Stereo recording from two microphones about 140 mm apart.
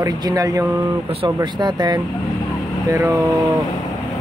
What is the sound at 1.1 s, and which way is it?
Speech, 35° right (ahead or behind).